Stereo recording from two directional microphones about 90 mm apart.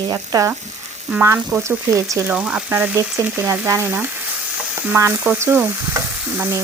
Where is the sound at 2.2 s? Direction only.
15° right (ahead or behind).